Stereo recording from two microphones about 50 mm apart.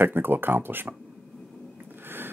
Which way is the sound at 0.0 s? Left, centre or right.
Right.